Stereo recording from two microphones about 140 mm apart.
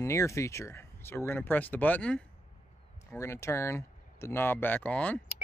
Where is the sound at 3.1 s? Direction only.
20° left (ahead or behind).